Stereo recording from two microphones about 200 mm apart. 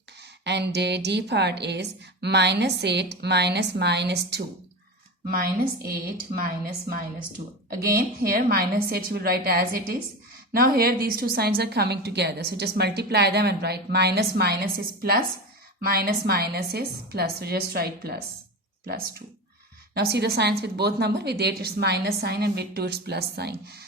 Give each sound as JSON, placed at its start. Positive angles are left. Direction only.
{"t": 0.2, "sound": "a woman's voice", "side_deg": -60}
{"t": 5.9, "sound": "a woman's voice", "side_deg": -45}
{"t": 7.7, "sound": "a woman's voice", "side_deg": -50}
{"t": 19.9, "sound": "a woman's voice", "side_deg": -55}